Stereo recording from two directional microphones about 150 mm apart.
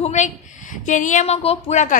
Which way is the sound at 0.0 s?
50° left (ahead or behind).